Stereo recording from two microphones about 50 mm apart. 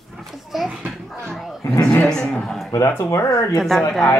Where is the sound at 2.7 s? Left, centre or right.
Left.